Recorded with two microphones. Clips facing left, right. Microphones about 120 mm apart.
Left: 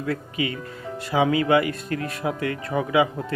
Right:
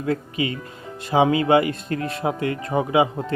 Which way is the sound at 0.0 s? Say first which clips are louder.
Right 3 dB; 25° right (ahead or behind).